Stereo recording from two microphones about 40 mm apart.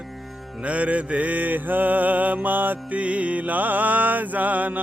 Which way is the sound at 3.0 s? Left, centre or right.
Right.